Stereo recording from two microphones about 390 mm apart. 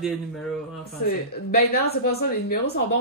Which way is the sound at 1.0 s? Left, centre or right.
Left.